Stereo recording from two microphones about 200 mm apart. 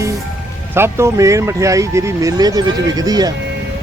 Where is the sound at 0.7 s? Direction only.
10° right (ahead or behind).